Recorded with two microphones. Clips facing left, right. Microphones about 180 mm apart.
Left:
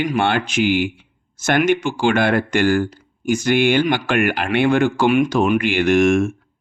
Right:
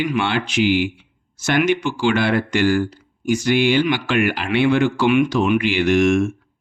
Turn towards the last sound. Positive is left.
turn(degrees=50)  # may be behind; listen again after turning